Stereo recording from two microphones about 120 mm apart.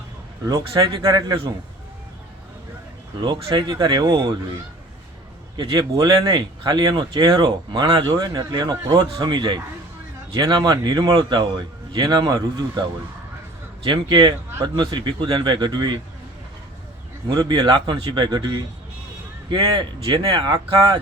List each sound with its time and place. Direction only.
0.8 s speech: 35° right (ahead or behind)
3.2 s speech: 45° right (ahead or behind)
5.5 s speech: 35° right (ahead or behind)
13.8 s speech: 40° right (ahead or behind)
17.2 s speech: 35° right (ahead or behind)